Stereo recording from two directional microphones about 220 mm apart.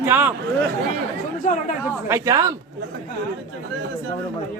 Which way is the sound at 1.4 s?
35° left (ahead or behind).